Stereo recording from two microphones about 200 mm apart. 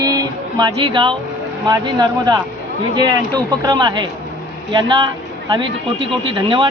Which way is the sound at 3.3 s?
20° right (ahead or behind).